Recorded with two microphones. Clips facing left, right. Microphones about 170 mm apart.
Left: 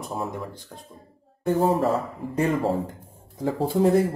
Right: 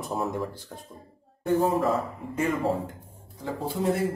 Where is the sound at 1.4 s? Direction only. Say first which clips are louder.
Left 2 dB; 35° left (ahead or behind).